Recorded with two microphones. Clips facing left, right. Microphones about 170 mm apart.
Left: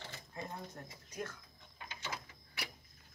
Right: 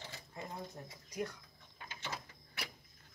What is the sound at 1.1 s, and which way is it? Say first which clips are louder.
Speech: right 3 dB; 15° right (ahead or behind).